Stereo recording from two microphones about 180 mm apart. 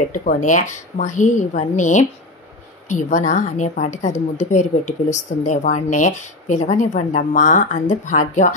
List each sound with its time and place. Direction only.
0.1 s a woman's voice: 45° left (ahead or behind)